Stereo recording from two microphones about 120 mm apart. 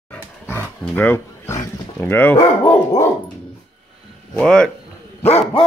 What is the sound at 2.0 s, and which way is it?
Speech, 15° left (ahead or behind).